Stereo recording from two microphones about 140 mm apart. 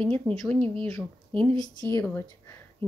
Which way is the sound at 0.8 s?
20° left (ahead or behind).